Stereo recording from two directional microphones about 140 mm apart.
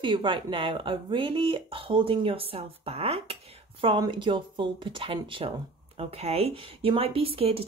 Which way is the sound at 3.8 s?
35° right (ahead or behind).